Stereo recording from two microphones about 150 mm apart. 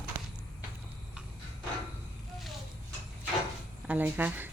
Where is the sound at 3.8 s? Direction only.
10° right (ahead or behind).